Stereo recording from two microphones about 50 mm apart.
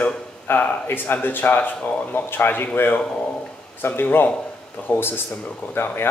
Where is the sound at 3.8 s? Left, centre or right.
Left.